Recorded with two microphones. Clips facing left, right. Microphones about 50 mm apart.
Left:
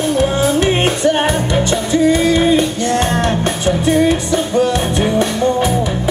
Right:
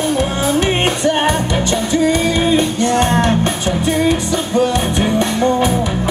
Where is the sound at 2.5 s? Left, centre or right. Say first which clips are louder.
Even; right.